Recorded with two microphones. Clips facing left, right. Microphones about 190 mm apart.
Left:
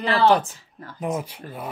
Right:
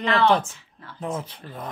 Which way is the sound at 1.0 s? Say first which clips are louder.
Left 3 dB; 15° left (ahead or behind).